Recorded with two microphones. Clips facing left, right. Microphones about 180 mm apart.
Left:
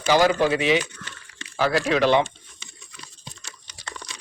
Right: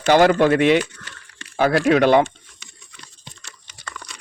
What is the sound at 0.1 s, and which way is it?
Speech, 55° right (ahead or behind).